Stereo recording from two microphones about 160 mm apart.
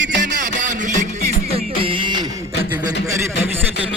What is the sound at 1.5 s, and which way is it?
Music, 35° right (ahead or behind).